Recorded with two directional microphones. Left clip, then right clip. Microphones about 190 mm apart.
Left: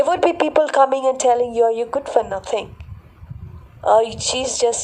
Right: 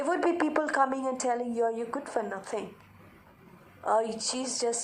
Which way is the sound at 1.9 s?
40° left (ahead or behind).